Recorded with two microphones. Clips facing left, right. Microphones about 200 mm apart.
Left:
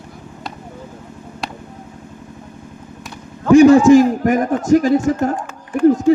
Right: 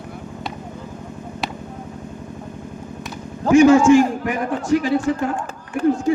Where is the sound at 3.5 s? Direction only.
35° left (ahead or behind).